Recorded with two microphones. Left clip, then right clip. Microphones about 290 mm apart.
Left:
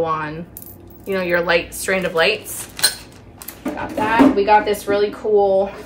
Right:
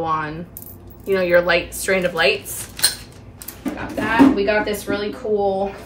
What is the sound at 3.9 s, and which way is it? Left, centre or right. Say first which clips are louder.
Speech: left 1 dB; centre.